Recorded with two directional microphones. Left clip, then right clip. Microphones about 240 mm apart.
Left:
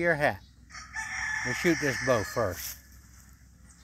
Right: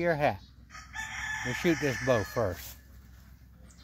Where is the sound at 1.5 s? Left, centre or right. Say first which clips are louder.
Left 1 dB; centre.